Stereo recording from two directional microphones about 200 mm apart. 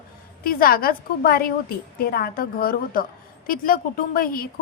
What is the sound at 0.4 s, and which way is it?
A woman's voice, 45° left (ahead or behind).